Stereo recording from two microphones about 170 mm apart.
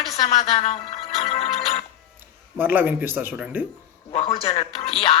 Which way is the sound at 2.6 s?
10° right (ahead or behind).